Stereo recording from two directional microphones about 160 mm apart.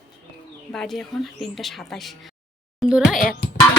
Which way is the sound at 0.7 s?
5° left (ahead or behind).